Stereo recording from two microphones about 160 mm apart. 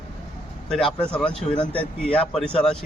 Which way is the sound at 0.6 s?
5° left (ahead or behind).